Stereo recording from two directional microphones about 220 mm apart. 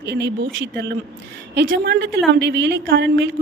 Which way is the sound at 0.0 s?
50° right (ahead or behind).